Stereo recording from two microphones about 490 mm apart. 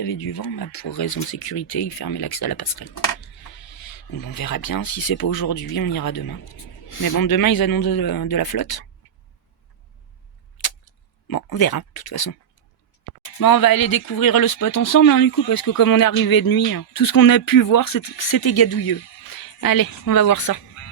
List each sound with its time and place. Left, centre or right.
0.0 s speech: left
11.3 s speech: left
13.4 s speech: left